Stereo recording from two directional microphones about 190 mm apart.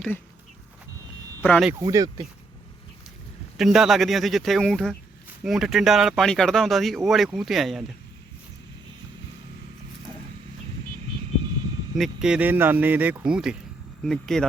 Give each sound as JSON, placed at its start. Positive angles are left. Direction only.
{"t": 1.4, "sound": "speech", "side_deg": 0}
{"t": 1.8, "sound": "speech", "side_deg": -20}
{"t": 3.6, "sound": "speech", "side_deg": 0}
{"t": 11.9, "sound": "speech", "side_deg": 0}